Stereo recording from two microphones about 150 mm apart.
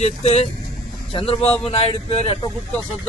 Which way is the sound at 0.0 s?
45° left (ahead or behind).